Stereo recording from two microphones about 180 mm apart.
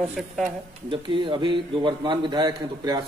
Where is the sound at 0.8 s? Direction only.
30° right (ahead or behind).